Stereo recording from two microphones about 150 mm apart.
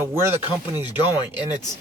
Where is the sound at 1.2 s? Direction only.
30° left (ahead or behind).